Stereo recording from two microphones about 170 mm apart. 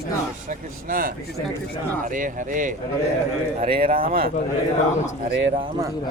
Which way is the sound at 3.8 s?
60° right (ahead or behind).